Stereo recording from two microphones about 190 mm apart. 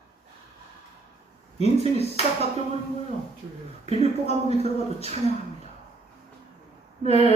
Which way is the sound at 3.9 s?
35° left (ahead or behind).